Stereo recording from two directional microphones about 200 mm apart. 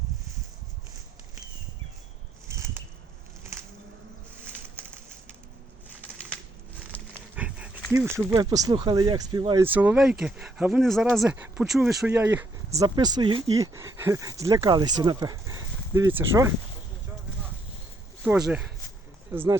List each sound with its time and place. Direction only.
7.3 s dog: 5° right (ahead or behind)
7.9 s speech: 10° right (ahead or behind)
9.6 s speech: 10° right (ahead or behind)
12.8 s speech: 20° right (ahead or behind)
18.2 s speech: 5° right (ahead or behind)